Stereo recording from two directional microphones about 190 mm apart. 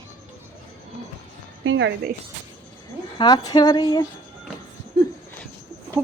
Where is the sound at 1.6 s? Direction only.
75° right (ahead or behind).